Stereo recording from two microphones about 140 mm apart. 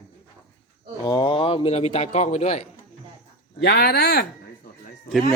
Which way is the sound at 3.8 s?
90° left.